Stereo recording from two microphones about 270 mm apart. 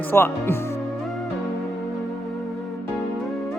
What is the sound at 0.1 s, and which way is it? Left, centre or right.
Speech, centre.